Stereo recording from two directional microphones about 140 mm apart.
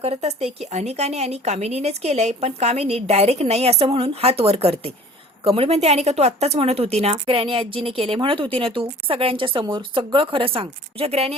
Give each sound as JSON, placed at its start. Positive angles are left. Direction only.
{"t": 0.0, "sound": "speech", "side_deg": -50}